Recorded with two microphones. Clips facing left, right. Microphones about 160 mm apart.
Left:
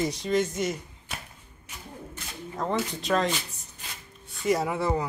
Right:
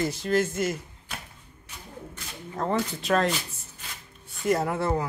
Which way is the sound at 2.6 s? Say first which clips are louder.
Right 2 dB; 5° right (ahead or behind).